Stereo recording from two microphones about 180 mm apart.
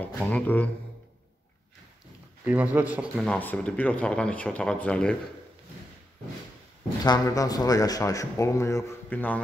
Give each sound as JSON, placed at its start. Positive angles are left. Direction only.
{"t": 0.0, "sound": "speech", "side_deg": 10}
{"t": 2.4, "sound": "speech", "side_deg": -10}
{"t": 3.3, "sound": "speech", "side_deg": 5}
{"t": 7.1, "sound": "speech", "side_deg": 20}